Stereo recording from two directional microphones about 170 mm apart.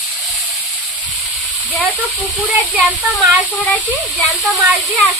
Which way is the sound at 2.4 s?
10° right (ahead or behind).